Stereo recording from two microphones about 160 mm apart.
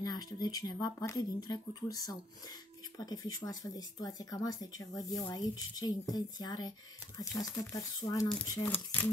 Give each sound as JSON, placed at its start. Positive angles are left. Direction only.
{"t": 0.0, "sound": "speech", "side_deg": 25}
{"t": 8.5, "sound": "speech", "side_deg": 10}